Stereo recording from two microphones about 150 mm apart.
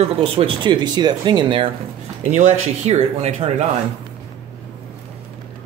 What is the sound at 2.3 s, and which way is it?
Speech, 50° right (ahead or behind).